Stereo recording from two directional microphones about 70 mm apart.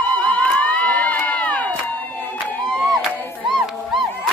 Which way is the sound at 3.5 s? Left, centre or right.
Centre.